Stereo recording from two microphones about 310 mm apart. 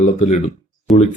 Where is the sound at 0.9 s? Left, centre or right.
Centre.